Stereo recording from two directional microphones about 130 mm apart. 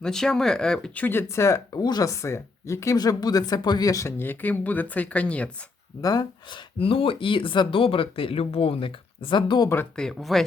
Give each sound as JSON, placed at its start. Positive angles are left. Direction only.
{"t": 0.0, "sound": "speech", "side_deg": 5}
{"t": 6.0, "sound": "speech", "side_deg": 30}
{"t": 6.7, "sound": "speech", "side_deg": 45}
{"t": 9.9, "sound": "speech", "side_deg": 5}